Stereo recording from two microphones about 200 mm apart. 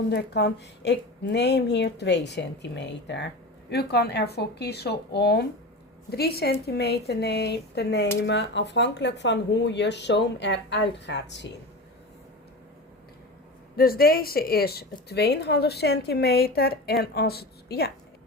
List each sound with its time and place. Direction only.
0.1 s a woman's voice: 55° left (ahead or behind)
13.7 s a woman's voice: 50° left (ahead or behind)